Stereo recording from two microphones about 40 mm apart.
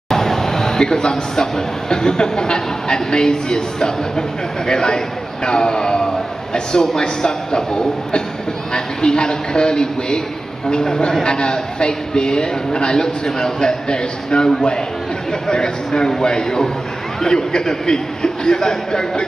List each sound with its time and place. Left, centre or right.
0.1 s a man's voice: centre